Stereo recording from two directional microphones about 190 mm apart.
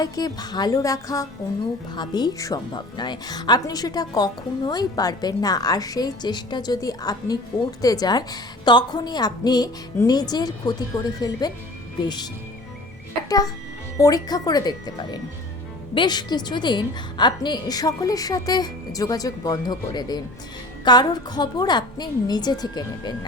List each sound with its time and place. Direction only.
0.0 s a woman's voice: 20° left (ahead or behind)